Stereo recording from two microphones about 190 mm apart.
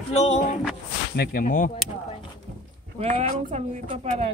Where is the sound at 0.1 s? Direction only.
40° left (ahead or behind).